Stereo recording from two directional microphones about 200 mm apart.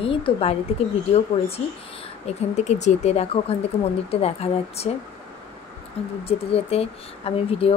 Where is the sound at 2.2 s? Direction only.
35° left (ahead or behind).